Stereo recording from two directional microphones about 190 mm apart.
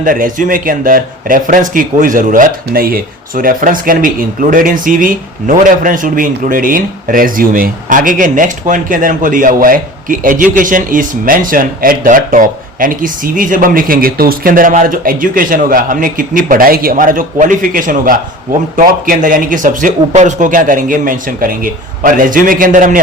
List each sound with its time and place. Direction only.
0.0 s speech: 45° right (ahead or behind)